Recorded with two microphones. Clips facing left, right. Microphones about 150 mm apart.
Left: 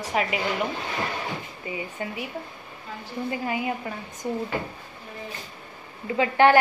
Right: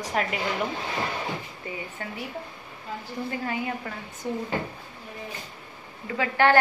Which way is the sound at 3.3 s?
15° left (ahead or behind).